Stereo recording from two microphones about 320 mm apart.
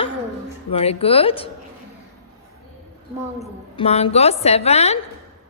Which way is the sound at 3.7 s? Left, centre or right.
Centre.